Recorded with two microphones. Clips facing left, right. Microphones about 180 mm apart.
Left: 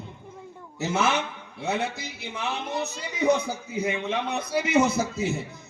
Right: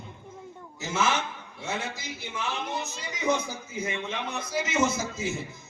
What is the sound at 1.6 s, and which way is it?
A man's voice, 65° left (ahead or behind).